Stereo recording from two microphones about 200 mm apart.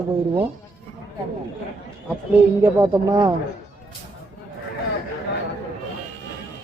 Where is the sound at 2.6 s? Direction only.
15° right (ahead or behind).